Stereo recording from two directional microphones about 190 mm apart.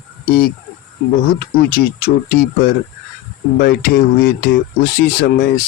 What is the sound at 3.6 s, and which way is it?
Speech, 50° left (ahead or behind).